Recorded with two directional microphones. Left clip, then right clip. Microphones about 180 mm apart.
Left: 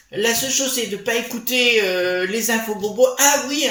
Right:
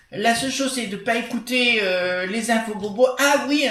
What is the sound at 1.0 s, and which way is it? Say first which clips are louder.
Speech: left 1 dB; 40° left (ahead or behind).